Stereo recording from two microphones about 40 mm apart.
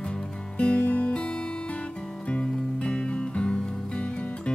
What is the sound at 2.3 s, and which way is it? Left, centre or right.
Music, left.